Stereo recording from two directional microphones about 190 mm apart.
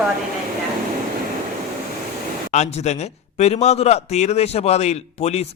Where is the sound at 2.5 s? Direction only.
35° left (ahead or behind).